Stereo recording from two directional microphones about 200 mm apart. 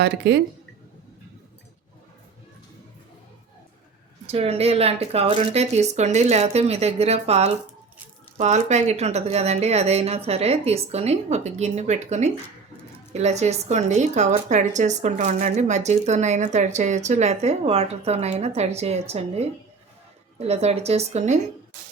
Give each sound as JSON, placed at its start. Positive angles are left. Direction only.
{"t": 4.3, "sound": "a woman's voice", "side_deg": -30}
{"t": 20.5, "sound": "a woman's voice", "side_deg": -30}